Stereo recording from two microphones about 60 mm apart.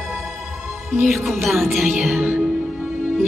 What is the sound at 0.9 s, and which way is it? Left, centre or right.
Music, centre.